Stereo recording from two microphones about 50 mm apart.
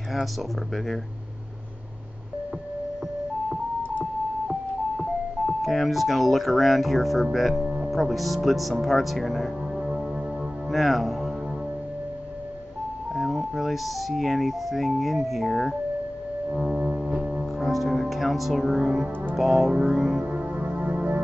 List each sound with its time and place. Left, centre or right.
0.1 s speech: centre
4.9 s speech: centre
13.1 s speech: centre
16.5 s speech: centre
19.7 s music: centre
20.2 s music: right